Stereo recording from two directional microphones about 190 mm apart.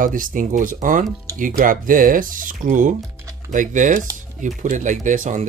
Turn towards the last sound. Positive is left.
turn(degrees=-40)  # may be behind; listen again after turning